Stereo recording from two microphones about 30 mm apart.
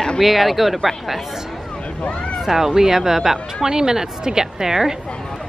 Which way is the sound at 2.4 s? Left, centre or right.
Centre.